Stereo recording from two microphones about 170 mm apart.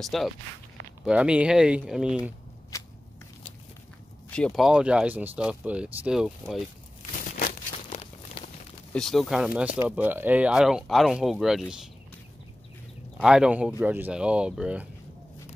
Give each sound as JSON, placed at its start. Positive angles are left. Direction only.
{"t": 0.0, "sound": "speech", "side_deg": 0}
{"t": 2.7, "sound": "shuffling cards", "side_deg": 20}
{"t": 4.3, "sound": "speech", "side_deg": 5}
{"t": 7.3, "sound": "crumpling", "side_deg": 60}
{"t": 8.4, "sound": "a sound", "side_deg": 30}
{"t": 8.9, "sound": "speech", "side_deg": 0}
{"t": 13.2, "sound": "speech", "side_deg": -5}